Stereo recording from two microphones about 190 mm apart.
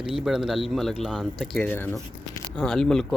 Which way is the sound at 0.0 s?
Centre (ahead or behind).